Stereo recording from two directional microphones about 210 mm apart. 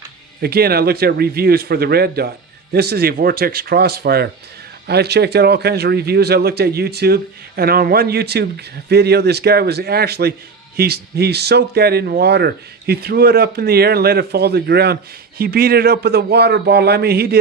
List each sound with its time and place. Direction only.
0.4 s speech: 45° right (ahead or behind)